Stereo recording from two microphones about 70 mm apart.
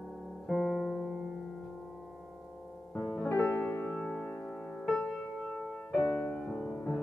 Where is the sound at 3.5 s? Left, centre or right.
Left.